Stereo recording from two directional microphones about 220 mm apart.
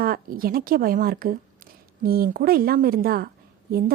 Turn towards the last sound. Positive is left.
turn(degrees=-40)  # may be behind; listen again after turning